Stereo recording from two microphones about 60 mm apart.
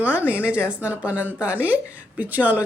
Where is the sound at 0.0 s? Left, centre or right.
Right.